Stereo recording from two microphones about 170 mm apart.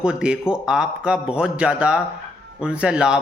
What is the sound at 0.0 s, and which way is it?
A man's voice, 5° right (ahead or behind).